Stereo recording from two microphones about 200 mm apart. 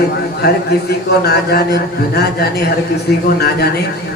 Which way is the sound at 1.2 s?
50° left (ahead or behind).